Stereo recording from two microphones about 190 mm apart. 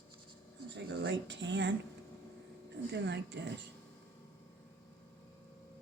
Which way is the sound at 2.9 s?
65° right (ahead or behind).